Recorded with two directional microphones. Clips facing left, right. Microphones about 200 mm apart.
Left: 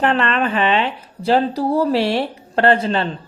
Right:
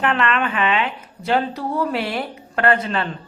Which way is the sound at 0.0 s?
35° left (ahead or behind).